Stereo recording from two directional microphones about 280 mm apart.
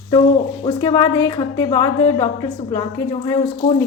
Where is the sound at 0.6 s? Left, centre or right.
Centre.